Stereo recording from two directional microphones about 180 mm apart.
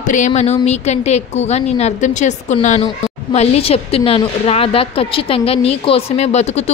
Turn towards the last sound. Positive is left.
turn(degrees=40)  # may be behind; listen again after turning